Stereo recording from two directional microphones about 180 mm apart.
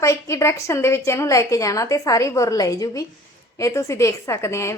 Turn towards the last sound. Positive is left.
turn(degrees=15)  # may be behind; listen again after turning